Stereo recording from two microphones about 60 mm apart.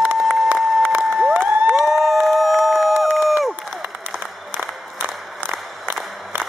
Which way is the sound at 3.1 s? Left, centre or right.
Centre.